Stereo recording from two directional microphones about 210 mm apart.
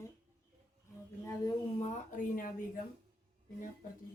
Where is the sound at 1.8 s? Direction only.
35° left (ahead or behind).